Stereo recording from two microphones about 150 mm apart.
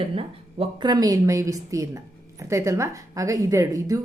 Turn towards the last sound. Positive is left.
turn(degrees=-20)  # may be behind; listen again after turning